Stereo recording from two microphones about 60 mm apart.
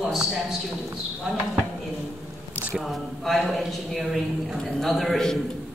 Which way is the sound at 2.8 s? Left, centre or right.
Centre.